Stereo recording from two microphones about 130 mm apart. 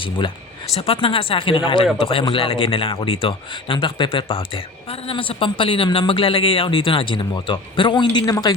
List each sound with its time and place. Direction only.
0.7 s speech: 50° left (ahead or behind); by 8.5 s 30° left (ahead or behind)